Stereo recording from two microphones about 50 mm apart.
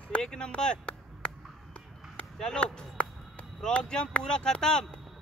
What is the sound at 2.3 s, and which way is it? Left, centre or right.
Speech, centre.